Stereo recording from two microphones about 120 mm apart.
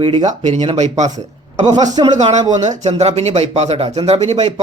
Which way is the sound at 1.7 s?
35° right (ahead or behind).